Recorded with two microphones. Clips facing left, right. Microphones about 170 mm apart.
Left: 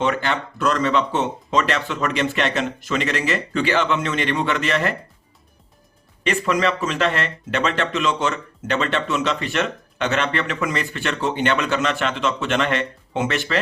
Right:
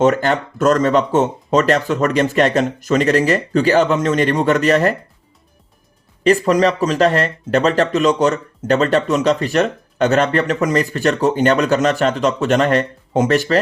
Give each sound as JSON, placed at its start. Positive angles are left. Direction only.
{"t": 0.0, "sound": "speech", "side_deg": -45}
{"t": 6.2, "sound": "speech", "side_deg": -40}